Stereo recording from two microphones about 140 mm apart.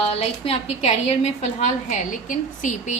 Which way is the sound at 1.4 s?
60° left (ahead or behind).